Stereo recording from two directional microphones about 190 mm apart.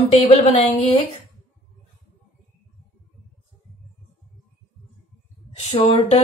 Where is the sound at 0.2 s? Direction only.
35° left (ahead or behind).